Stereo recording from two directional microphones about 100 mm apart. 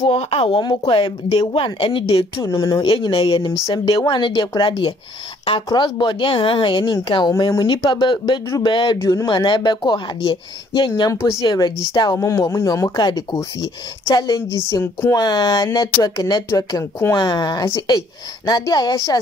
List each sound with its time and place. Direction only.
0.0 s speech: 75° left (ahead or behind)
0.6 s speech: 50° left (ahead or behind)
2.4 s speech: 30° left (ahead or behind)
2.7 s a woman's voice: 50° left (ahead or behind)
9.0 s speech: 35° left (ahead or behind)
9.3 s a woman's voice: 50° left (ahead or behind)
11.1 s speech: 30° left (ahead or behind)
12.2 s speech: 30° left (ahead or behind)